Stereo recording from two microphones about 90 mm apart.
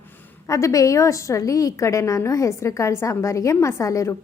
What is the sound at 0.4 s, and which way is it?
A woman's voice, 35° left (ahead or behind).